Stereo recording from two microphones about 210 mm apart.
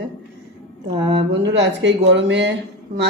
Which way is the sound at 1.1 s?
55° right (ahead or behind).